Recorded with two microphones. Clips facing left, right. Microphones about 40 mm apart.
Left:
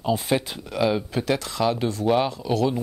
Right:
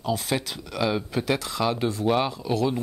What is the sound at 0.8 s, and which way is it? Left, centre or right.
Speech, centre.